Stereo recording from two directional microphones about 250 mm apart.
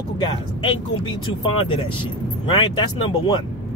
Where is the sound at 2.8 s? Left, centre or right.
Centre.